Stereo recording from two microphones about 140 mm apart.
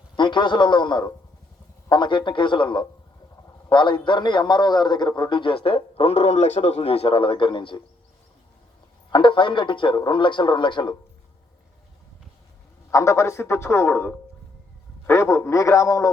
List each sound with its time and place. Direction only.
0.2 s a man's voice: 35° left (ahead or behind)
9.0 s a man's voice: 35° left (ahead or behind)
12.9 s a man's voice: 20° left (ahead or behind)